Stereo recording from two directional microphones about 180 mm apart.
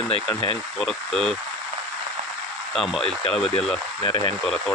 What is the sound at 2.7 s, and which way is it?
Speech, centre (ahead or behind).